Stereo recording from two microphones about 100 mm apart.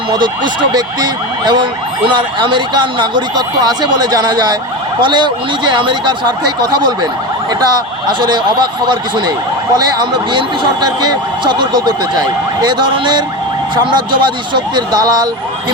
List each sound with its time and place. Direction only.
0.1 s speech: 50° right (ahead or behind)
8.2 s speech: 50° right (ahead or behind)